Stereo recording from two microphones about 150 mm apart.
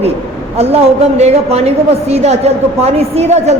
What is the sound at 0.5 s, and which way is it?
A woman's voice, 45° right (ahead or behind).